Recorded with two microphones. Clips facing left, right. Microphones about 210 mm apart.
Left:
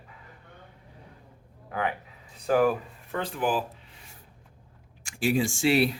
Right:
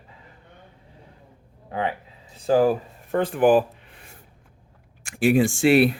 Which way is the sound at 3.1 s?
55° right (ahead or behind).